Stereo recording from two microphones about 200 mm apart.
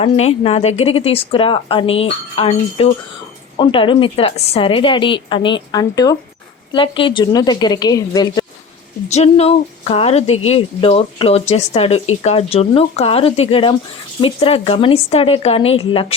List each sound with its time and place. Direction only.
0.0 s a woman's voice: 30° left (ahead or behind)
9.0 s a woman's voice: 35° left (ahead or behind)